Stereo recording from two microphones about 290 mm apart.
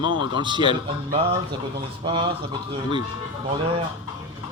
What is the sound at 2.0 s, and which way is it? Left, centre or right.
Speech, centre.